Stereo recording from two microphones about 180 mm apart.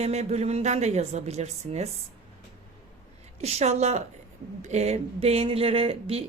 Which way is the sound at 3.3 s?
35° right (ahead or behind).